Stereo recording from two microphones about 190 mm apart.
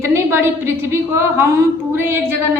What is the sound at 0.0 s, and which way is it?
A woman's voice, 15° right (ahead or behind).